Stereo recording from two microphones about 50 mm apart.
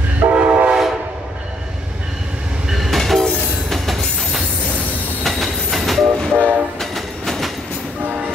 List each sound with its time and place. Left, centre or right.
0.2 s train: right
2.7 s train: centre
3.0 s train: centre
3.7 s music: centre
5.2 s train: centre
6.3 s train: right
6.8 s train: centre
8.0 s music: right